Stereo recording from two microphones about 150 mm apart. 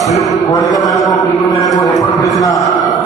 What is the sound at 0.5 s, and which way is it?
Speech, 25° left (ahead or behind).